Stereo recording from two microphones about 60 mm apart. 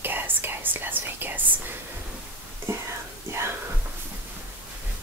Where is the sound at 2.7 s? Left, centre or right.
Right.